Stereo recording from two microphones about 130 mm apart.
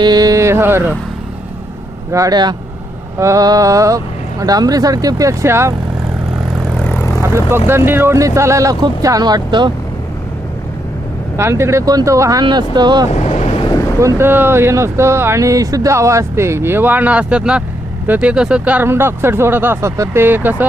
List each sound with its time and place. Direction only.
0.0 s a sound: 30° right (ahead or behind)
2.1 s speech: 30° right (ahead or behind)
6.7 s vehicle: 15° left (ahead or behind)
7.2 s speech: 20° right (ahead or behind)
11.3 s speech: 20° right (ahead or behind)
13.1 s boat: 55° left (ahead or behind)
14.0 s speech: 20° right (ahead or behind)